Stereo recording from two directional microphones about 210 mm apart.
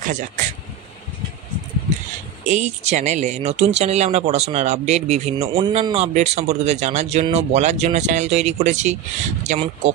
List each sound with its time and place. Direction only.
0.0 s speech: 40° right (ahead or behind)
2.4 s speech: 35° right (ahead or behind)